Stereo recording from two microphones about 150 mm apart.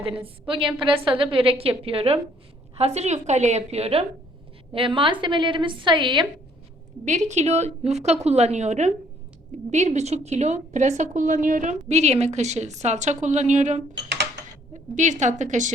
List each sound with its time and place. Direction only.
0.4 s a woman's voice: 35° right (ahead or behind)
7.0 s a woman's voice: 50° right (ahead or behind)